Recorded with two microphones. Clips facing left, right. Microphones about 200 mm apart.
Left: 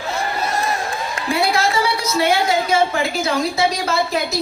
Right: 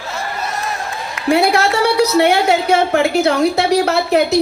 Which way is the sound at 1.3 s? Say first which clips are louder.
Right 6 dB; 65° right (ahead or behind).